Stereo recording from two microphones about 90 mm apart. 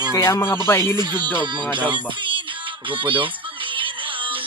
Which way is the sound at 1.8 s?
60° right (ahead or behind).